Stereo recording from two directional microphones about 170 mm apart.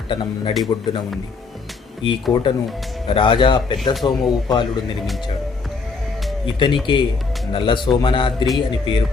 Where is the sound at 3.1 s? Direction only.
30° left (ahead or behind).